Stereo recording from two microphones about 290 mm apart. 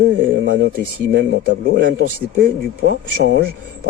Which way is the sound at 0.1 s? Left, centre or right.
Right.